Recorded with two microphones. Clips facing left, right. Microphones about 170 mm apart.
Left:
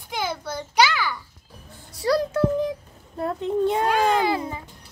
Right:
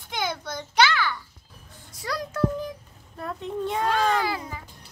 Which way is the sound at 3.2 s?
30° left (ahead or behind).